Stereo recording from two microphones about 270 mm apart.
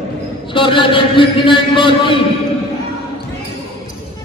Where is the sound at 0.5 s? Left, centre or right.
Centre.